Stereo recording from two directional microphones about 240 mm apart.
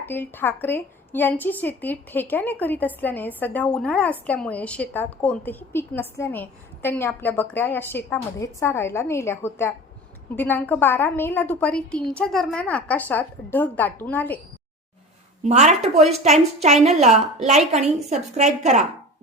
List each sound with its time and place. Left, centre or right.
0.0 s a woman's voice: centre
15.4 s a woman's voice: right
18.1 s a woman's voice: right